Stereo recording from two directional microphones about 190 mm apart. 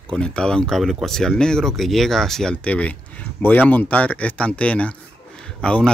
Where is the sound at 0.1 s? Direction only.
5° left (ahead or behind).